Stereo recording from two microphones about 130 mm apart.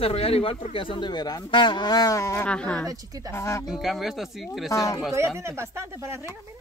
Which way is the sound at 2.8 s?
25° right (ahead or behind).